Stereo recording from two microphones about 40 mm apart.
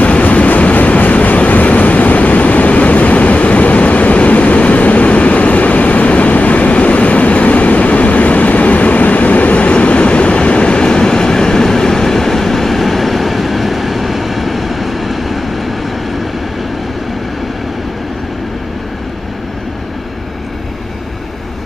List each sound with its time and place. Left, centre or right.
0.0 s vehicle: left; by 15.7 s centre